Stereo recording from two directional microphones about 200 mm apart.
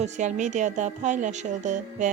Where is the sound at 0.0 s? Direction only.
35° right (ahead or behind).